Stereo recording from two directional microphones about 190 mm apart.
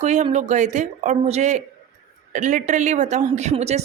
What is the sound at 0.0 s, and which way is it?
Speech, 40° right (ahead or behind).